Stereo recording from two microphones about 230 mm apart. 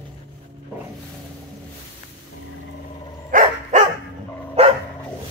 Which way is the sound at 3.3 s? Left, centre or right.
Right.